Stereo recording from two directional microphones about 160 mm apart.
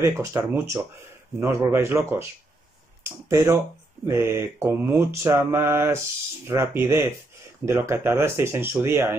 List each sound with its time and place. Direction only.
0.0 s mantra: 15° right (ahead or behind)
3.0 s speech: 15° right (ahead or behind)
4.0 s mantra: 15° right (ahead or behind)